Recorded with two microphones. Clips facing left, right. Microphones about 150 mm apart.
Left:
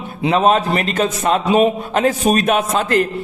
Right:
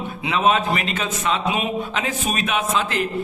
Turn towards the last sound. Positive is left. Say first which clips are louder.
# left 6 dB
turn(degrees=45)  # may be behind; listen again after turning